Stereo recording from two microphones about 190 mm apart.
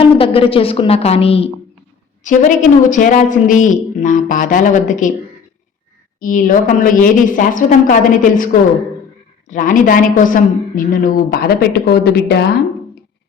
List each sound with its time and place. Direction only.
0.0 s a woman's voice: 30° left (ahead or behind)
2.3 s speech: 40° left (ahead or behind)
6.1 s a woman's voice: 45° left (ahead or behind)
9.5 s a woman's voice: 45° left (ahead or behind); by 12.5 s 60° left (ahead or behind)